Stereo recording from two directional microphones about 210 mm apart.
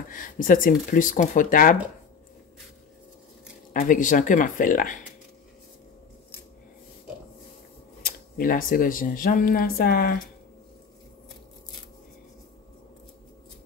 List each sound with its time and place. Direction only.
0.1 s speech: 40° left (ahead or behind)
3.7 s speech: 40° left (ahead or behind)
8.0 s speech: 45° left (ahead or behind)